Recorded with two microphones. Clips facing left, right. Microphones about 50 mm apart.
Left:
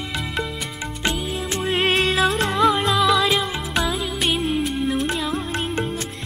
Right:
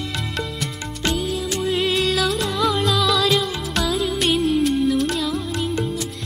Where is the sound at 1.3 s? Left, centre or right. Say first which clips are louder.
Right 1 dB; left.